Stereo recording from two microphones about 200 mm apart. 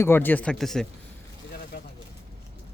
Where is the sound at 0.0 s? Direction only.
10° left (ahead or behind).